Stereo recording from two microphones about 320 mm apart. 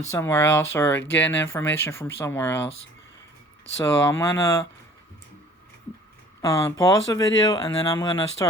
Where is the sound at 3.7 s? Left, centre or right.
Centre.